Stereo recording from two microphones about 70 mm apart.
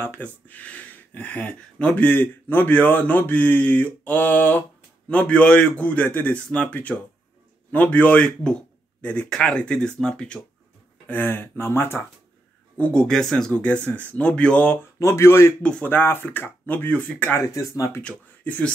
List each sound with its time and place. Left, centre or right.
0.5 s a man's voice: left
11.1 s speech: left
12.7 s speech: left
13.0 s a man's voice: centre
13.5 s speech: centre
15.0 s speech: left
17.6 s speech: left
18.0 s speech: centre